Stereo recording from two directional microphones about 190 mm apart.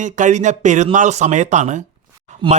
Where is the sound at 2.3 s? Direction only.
40° right (ahead or behind).